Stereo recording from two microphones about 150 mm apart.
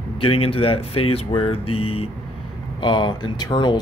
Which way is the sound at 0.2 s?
40° left (ahead or behind).